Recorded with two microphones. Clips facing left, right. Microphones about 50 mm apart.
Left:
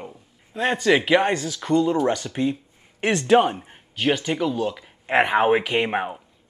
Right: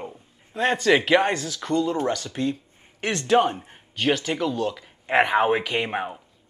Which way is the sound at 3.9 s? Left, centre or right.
Centre.